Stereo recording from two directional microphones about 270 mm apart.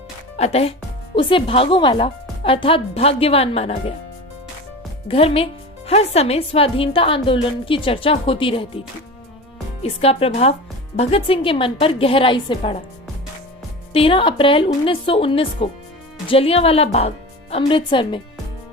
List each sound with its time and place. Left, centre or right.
0.3 s a woman's voice: left
5.0 s a woman's voice: left
9.8 s a woman's voice: left
13.9 s a woman's voice: centre